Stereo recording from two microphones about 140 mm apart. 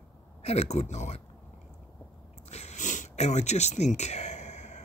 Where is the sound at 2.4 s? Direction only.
55° left (ahead or behind).